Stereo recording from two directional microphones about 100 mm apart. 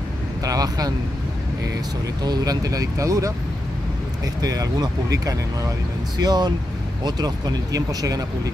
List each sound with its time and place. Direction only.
0.4 s speech: 40° right (ahead or behind)
2.2 s speech: 45° right (ahead or behind)
4.4 s speech: 40° right (ahead or behind)